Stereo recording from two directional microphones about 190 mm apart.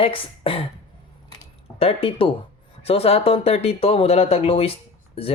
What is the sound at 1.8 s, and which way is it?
Speech, 30° left (ahead or behind).